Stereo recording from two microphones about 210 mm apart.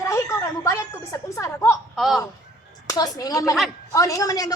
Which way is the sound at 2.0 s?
Centre (ahead or behind).